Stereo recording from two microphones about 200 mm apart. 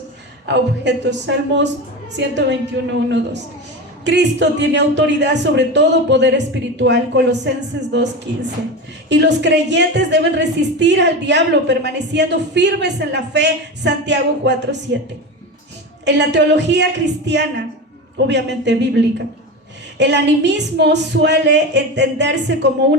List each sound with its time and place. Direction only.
0.4 s a woman's voice: 60° right (ahead or behind)
16.0 s a woman's voice: 60° right (ahead or behind)
18.3 s a woman's voice: 60° right (ahead or behind)